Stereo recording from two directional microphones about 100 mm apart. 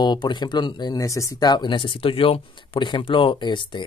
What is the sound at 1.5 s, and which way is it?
Speech, 50° left (ahead or behind).